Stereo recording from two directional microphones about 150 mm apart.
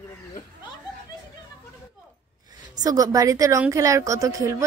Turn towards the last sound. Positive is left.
turn(degrees=-20)  # may be behind; listen again after turning